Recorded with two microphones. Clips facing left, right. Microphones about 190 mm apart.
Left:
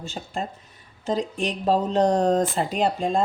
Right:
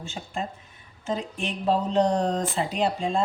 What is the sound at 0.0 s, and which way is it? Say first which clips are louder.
A woman's voice: left 2 dB; 35° left (ahead or behind).